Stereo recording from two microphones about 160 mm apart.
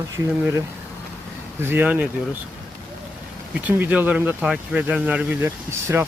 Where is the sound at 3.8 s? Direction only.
10° right (ahead or behind).